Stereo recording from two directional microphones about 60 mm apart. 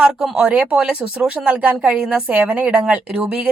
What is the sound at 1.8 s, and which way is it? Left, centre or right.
A woman's voice, centre.